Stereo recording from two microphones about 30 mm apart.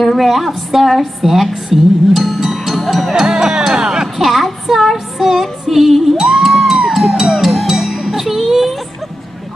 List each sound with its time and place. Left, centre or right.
0.2 s a woman's voice: centre
3.1 s music: centre
4.2 s child singing: centre
5.4 s music: centre